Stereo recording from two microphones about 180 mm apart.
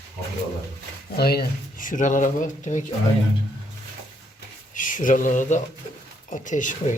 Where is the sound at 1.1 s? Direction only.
60° left (ahead or behind); by 2.8 s 45° left (ahead or behind).